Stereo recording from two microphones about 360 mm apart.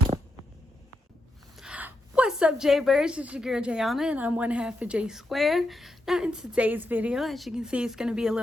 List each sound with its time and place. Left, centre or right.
1.5 s a woman's voice: centre